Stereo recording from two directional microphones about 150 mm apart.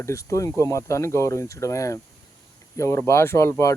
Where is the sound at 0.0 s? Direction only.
20° left (ahead or behind).